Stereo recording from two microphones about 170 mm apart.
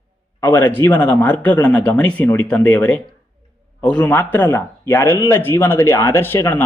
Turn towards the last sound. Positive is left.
turn(degrees=10)  # may be behind; listen again after turning